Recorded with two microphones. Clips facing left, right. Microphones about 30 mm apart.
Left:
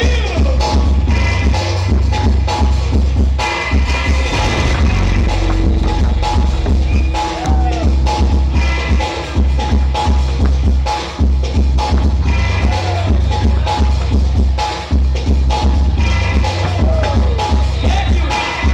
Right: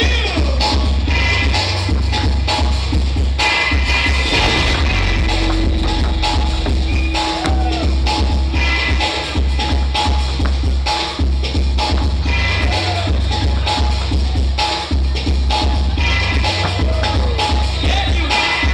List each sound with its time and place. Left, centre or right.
0.2 s music: right
12.3 s music: right
15.2 s music: right